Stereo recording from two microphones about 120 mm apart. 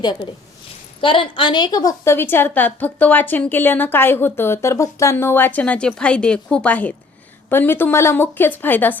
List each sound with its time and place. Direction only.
1.0 s a woman's voice: 45° left (ahead or behind); by 9.0 s 15° left (ahead or behind)